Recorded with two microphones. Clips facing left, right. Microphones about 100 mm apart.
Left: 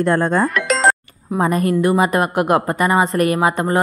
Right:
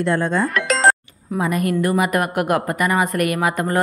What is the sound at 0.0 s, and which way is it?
Speech, 45° left (ahead or behind).